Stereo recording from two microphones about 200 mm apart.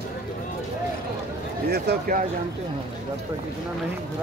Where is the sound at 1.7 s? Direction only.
50° right (ahead or behind).